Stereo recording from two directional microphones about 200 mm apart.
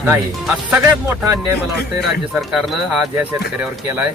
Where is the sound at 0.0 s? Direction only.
5° right (ahead or behind).